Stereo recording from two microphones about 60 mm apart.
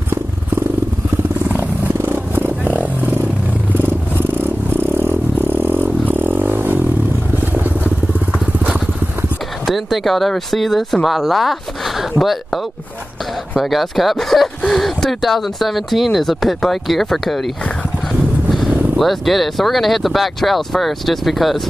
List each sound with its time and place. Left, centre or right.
2.0 s vehicle: right
2.6 s a sound: right
3.7 s vehicle: right
9.7 s speech: centre
13.6 s speech: centre
18.9 s speech: centre